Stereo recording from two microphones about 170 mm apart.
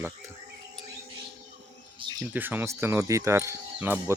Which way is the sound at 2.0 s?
25° right (ahead or behind).